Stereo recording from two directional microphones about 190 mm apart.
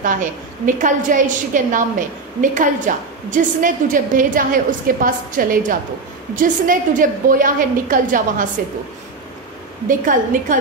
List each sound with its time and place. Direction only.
0.0 s a woman's voice: 45° right (ahead or behind)
9.8 s a woman's voice: 45° right (ahead or behind)